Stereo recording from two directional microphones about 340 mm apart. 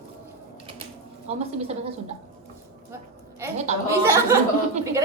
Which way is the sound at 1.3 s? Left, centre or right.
Centre.